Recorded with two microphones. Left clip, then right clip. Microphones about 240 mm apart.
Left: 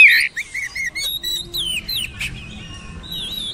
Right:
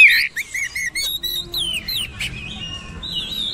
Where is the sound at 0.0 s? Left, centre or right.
Centre.